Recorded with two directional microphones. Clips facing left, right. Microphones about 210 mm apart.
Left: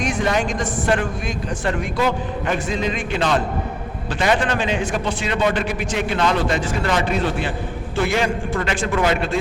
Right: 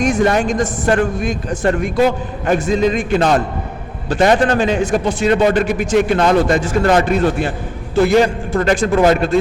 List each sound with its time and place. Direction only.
0.0 s a man's voice: 45° right (ahead or behind)